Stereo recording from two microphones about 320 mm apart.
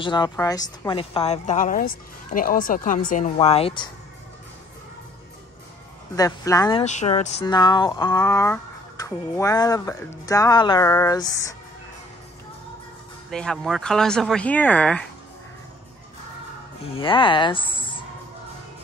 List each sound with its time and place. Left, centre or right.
0.0 s speech: centre
6.1 s speech: centre
13.3 s speech: centre
16.8 s speech: centre